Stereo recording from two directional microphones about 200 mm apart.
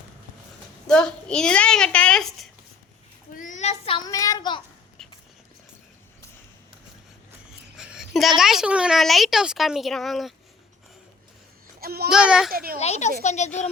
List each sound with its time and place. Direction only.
0.9 s speech: 5° left (ahead or behind)
3.3 s a child's voice: 40° left (ahead or behind); by 4.6 s 20° left (ahead or behind)
5.0 s a sound: 5° left (ahead or behind)
7.8 s a sound: centre (ahead or behind)
8.4 s speech: centre (ahead or behind)
11.8 s a child's voice: 50° right (ahead or behind)
12.1 s speech: 5° right (ahead or behind)
12.5 s speech: 50° right (ahead or behind)
12.8 s a child's voice: 35° left (ahead or behind)